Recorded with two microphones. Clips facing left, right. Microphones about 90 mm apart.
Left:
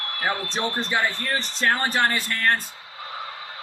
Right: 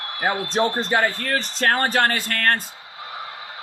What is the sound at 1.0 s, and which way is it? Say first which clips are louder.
Speech: right 3 dB; 65° right (ahead or behind).